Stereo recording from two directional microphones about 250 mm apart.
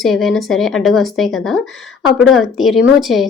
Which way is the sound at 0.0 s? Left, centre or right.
Centre.